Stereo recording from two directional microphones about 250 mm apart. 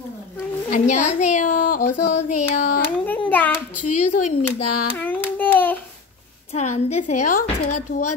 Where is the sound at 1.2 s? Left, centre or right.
Left.